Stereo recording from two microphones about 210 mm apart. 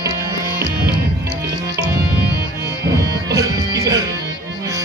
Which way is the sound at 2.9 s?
15° right (ahead or behind).